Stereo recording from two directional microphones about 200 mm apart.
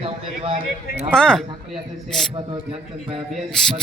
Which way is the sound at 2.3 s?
25° right (ahead or behind).